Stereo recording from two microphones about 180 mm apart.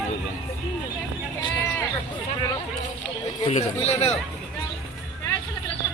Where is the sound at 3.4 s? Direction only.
35° left (ahead or behind).